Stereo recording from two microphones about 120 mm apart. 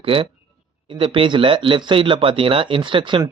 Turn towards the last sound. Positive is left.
turn(degrees=-45)  # may be behind; listen again after turning